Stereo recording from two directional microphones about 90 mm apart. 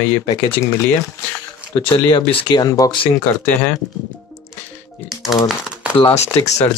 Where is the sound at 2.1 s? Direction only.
50° left (ahead or behind).